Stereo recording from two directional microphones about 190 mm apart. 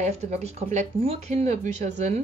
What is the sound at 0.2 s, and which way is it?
A woman's voice, 35° right (ahead or behind).